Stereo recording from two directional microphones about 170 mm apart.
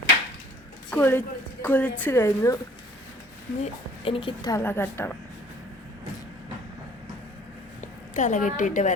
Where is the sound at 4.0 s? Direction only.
30° left (ahead or behind).